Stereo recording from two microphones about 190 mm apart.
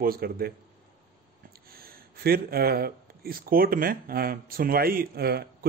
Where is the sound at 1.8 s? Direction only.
50° right (ahead or behind).